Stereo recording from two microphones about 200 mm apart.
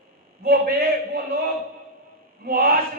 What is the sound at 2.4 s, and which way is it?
Speech, 50° right (ahead or behind).